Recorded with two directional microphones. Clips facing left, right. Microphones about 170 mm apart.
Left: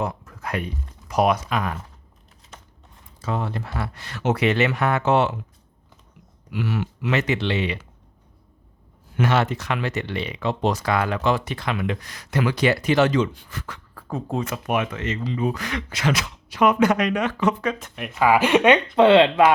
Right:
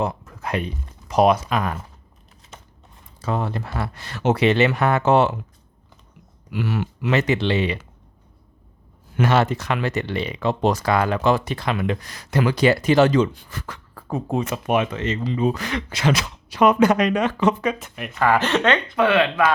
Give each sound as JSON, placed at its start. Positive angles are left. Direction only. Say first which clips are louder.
{"t": 0.0, "sound": "speech", "louder": "right 3 dB", "side_deg": -25}
{"t": 3.2, "sound": "speech", "louder": "right 2 dB", "side_deg": -40}
{"t": 6.5, "sound": "speech", "louder": "right 1 dB", "side_deg": -45}
{"t": 9.1, "sound": "speech", "louder": "right 2 dB", "side_deg": -35}
{"t": 14.1, "sound": "speech", "louder": "right 3 dB", "side_deg": -15}
{"t": 17.6, "sound": "speech", "louder": "right 2 dB", "side_deg": -10}
{"t": 18.9, "sound": "speech", "louder": "left 5 dB", "side_deg": 25}